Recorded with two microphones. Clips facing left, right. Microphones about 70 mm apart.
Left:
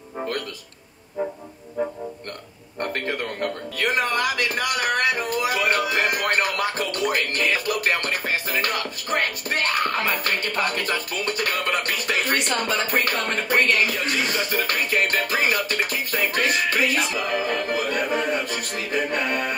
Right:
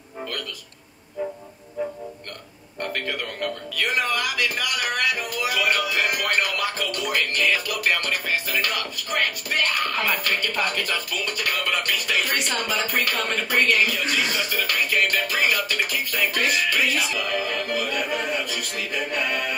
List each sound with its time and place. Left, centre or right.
2.8 s speech: left